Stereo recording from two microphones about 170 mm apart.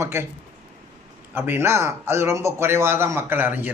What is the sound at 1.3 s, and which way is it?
Speech, 15° right (ahead or behind).